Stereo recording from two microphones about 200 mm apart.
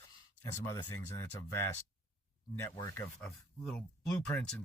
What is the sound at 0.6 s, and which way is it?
Speech, 15° left (ahead or behind).